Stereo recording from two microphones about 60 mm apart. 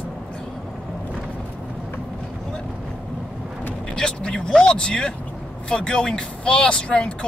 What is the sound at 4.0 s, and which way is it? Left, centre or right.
Speech, centre.